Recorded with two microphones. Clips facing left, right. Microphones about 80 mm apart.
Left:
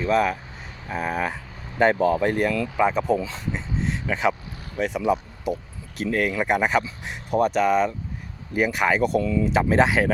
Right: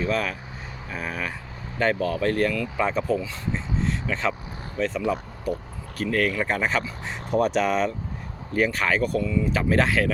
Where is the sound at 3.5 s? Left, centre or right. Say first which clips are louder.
Right 2 dB; centre.